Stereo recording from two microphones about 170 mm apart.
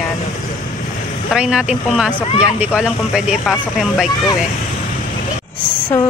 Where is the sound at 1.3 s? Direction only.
5° right (ahead or behind).